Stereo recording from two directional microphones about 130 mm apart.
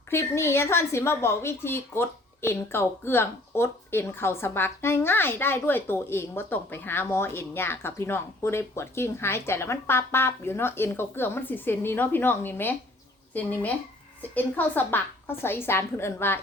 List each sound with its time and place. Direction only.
0.1 s a woman's voice: 20° left (ahead or behind)